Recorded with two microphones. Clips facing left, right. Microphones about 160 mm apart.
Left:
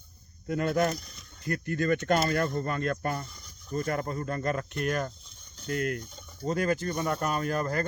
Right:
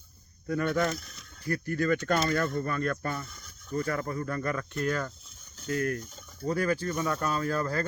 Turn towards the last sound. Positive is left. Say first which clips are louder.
# even
turn(degrees=20)  # may be behind; listen again after turning